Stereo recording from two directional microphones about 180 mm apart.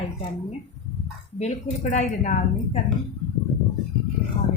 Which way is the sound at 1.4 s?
40° left (ahead or behind).